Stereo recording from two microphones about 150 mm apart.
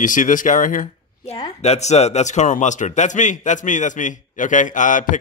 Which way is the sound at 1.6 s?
45° left (ahead or behind).